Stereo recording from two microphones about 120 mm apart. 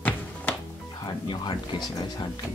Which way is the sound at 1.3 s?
40° left (ahead or behind).